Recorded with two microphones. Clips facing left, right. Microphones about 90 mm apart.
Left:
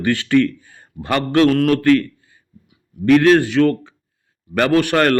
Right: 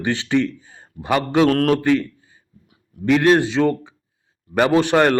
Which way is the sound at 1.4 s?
45° right (ahead or behind).